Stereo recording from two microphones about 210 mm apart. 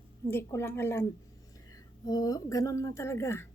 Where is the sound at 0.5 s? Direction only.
10° left (ahead or behind).